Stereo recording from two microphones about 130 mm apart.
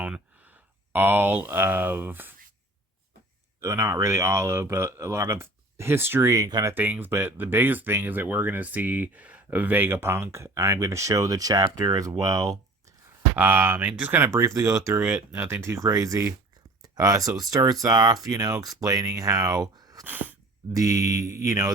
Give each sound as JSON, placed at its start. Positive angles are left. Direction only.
{"t": 0.0, "sound": "speech", "side_deg": -10}
{"t": 3.6, "sound": "speech", "side_deg": -25}
{"t": 6.7, "sound": "speech", "side_deg": -15}
{"t": 13.3, "sound": "speech", "side_deg": -15}
{"t": 15.0, "sound": "speech", "side_deg": -10}
{"t": 20.1, "sound": "speech", "side_deg": -15}
{"t": 20.7, "sound": "speech", "side_deg": -25}